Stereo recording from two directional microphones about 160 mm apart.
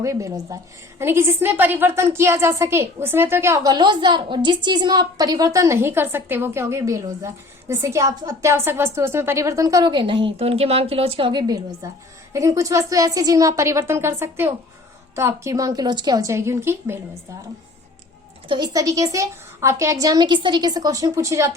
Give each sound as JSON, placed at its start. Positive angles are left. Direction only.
{"t": 0.0, "sound": "a woman's voice", "side_deg": -20}
{"t": 18.4, "sound": "a woman's voice", "side_deg": -30}